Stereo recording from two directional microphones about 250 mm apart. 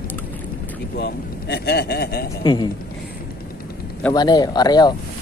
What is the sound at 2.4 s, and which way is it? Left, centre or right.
Speech, centre.